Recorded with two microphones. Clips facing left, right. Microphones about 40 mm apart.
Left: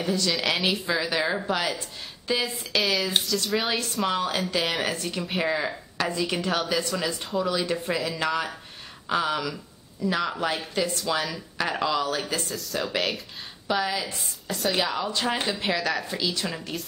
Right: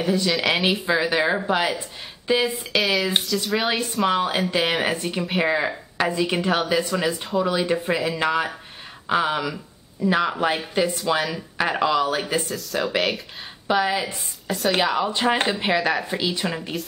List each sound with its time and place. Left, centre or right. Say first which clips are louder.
0.3 s speech: right 4 dB; centre
0.6 s speech: right 4 dB; centre
2.7 s speech: right 2 dB; centre
12.4 s speech: right 4 dB; centre
13.8 s speech: right 5 dB; right